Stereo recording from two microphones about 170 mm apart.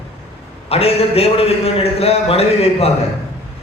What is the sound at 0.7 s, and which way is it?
A man's voice, 35° left (ahead or behind).